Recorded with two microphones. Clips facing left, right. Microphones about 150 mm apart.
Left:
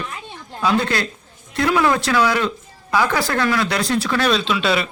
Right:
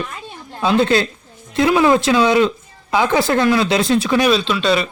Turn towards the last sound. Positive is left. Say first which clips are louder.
# right 2 dB
turn(degrees=5)  # may be behind; listen again after turning